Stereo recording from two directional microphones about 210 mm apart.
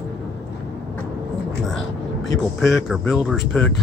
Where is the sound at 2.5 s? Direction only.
Centre (ahead or behind).